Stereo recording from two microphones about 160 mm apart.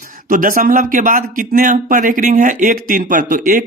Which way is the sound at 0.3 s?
60° right (ahead or behind).